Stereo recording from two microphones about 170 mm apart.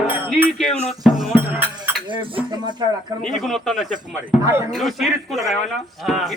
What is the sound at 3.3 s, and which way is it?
Speech, centre (ahead or behind).